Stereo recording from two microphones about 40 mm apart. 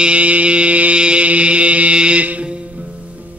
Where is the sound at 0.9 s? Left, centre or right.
Right.